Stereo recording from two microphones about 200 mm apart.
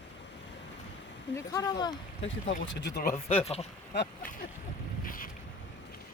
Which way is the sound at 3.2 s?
30° left (ahead or behind).